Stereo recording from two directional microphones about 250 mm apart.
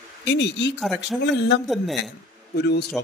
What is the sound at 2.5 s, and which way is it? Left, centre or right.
Speech, left.